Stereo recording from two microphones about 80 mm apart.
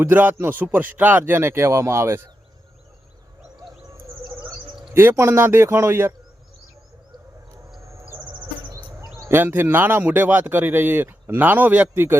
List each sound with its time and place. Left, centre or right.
0.0 s speech: right
4.9 s speech: right
9.3 s speech: right